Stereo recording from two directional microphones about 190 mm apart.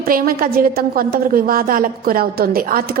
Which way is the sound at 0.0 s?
50° right (ahead or behind).